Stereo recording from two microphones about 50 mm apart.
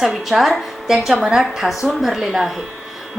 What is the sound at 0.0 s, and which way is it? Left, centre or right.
A woman's voice, centre.